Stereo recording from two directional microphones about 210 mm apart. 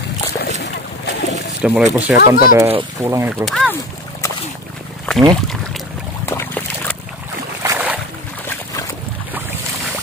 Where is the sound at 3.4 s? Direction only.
Centre (ahead or behind).